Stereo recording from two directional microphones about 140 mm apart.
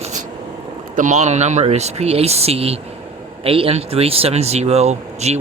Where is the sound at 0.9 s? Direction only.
60° right (ahead or behind).